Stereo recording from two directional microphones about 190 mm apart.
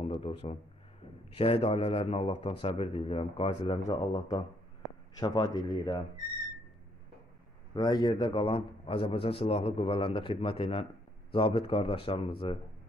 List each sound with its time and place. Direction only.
0.0 s speech: 30° left (ahead or behind)
5.2 s a man's voice: 20° left (ahead or behind)
7.7 s a man's voice: 20° left (ahead or behind)